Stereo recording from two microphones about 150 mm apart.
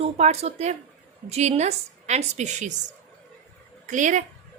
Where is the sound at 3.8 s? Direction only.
55° right (ahead or behind).